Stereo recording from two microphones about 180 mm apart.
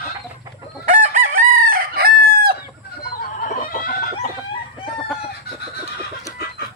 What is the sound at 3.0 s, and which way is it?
Chicken, 55° left (ahead or behind).